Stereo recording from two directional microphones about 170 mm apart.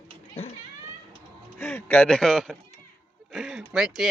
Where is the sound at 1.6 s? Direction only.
10° left (ahead or behind).